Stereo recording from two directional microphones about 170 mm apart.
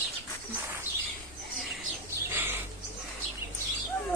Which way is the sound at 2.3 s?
10° right (ahead or behind).